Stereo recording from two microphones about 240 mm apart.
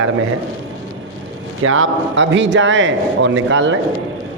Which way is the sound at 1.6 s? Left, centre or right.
Right.